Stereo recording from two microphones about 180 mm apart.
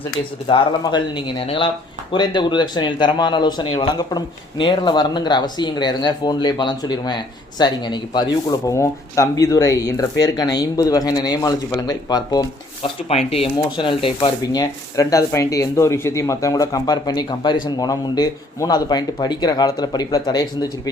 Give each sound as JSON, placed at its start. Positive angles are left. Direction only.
{"t": 0.4, "sound": "speech", "side_deg": 25}
{"t": 13.1, "sound": "speech", "side_deg": 35}